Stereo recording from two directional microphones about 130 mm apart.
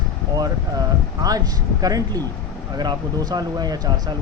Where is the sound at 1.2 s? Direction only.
30° right (ahead or behind).